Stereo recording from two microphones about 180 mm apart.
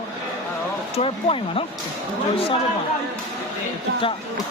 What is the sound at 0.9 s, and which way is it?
Speech, 30° left (ahead or behind).